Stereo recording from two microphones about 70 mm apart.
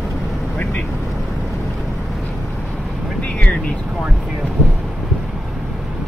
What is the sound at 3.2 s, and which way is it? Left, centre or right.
Vehicle, centre.